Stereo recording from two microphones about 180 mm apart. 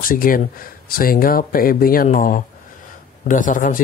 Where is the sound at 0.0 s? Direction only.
50° left (ahead or behind).